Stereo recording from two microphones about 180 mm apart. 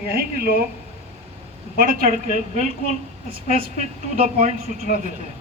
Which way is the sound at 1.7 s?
55° right (ahead or behind).